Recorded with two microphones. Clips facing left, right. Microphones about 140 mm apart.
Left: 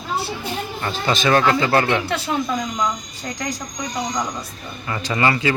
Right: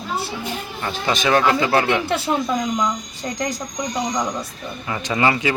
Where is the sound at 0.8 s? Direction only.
10° right (ahead or behind).